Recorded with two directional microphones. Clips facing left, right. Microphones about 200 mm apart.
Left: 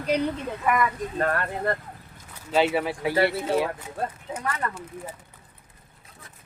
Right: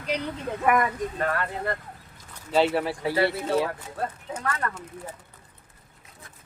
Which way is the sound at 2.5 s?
Centre (ahead or behind).